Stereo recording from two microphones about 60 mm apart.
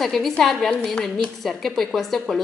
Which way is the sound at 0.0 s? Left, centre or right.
Centre.